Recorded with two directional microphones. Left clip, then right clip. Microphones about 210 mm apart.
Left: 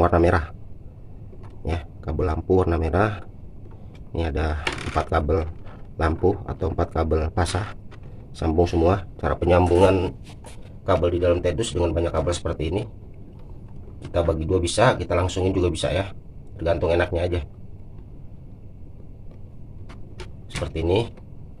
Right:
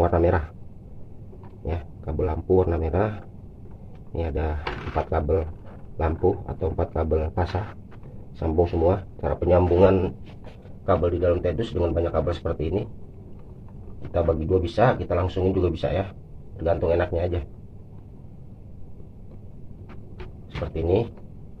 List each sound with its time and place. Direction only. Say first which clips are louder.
0.0 s speech: left 2 dB; 25° left (ahead or behind)
1.6 s a man's voice: left 2 dB; 25° left (ahead or behind)
14.1 s a man's voice: even; 15° left (ahead or behind)
20.6 s a man's voice: left 1 dB; 15° left (ahead or behind)